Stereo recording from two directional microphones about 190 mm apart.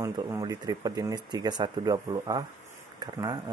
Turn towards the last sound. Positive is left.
turn(degrees=-20)  # may be behind; listen again after turning